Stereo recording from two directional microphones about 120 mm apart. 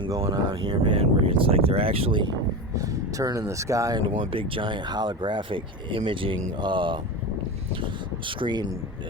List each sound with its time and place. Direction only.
0.1 s speech: 30° right (ahead or behind)
0.5 s speech: 50° right (ahead or behind)
2.7 s speech: 25° right (ahead or behind)
4.2 s speech: 45° right (ahead or behind)
8.3 s speech: 40° right (ahead or behind)